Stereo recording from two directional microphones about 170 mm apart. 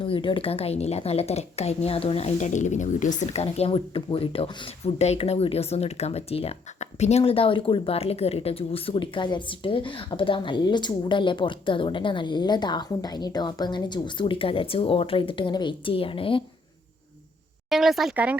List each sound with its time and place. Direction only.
0.0 s a woman's voice: 30° left (ahead or behind)
17.7 s speech: centre (ahead or behind)